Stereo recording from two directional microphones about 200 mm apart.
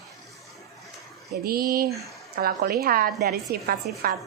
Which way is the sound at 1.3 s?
50° right (ahead or behind).